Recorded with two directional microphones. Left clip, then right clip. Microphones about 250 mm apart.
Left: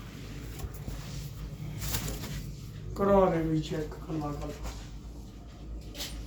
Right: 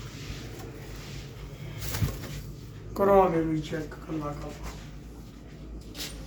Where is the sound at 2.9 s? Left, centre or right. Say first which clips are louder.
Right 4 dB; centre.